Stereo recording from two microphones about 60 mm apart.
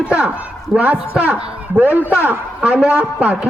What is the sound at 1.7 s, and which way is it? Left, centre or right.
Speech, right.